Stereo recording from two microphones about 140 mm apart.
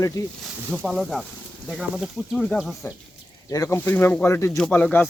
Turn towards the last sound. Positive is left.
turn(degrees=15)  # may be behind; listen again after turning